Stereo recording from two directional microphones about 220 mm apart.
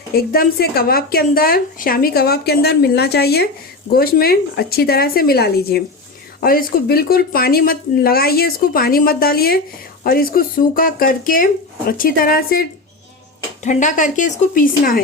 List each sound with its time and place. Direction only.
0.1 s a woman's voice: 45° left (ahead or behind)